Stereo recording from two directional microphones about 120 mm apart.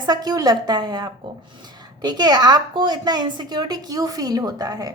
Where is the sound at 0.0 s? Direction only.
35° right (ahead or behind).